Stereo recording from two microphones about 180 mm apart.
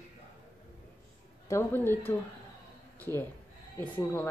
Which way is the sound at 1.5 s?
15° left (ahead or behind).